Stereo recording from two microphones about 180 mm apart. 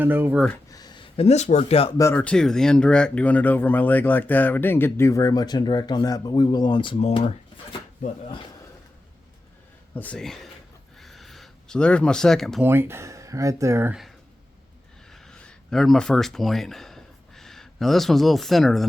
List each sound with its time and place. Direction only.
0.0 s speech: 10° right (ahead or behind)
0.7 s speech: 20° left (ahead or behind)
2.0 s speech: 10° left (ahead or behind); by 7.2 s 25° left (ahead or behind)
9.9 s speech: 10° left (ahead or behind)
11.0 s a sound: centre (ahead or behind)
12.6 s speech: 10° right (ahead or behind)
15.1 s a sound: 5° left (ahead or behind)